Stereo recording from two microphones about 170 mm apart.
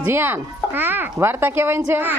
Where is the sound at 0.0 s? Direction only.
15° right (ahead or behind).